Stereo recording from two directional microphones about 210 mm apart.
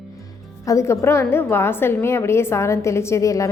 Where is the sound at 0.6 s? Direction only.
15° left (ahead or behind).